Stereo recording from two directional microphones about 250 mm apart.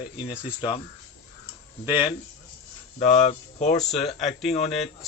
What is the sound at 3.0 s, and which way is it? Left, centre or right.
Speech, left.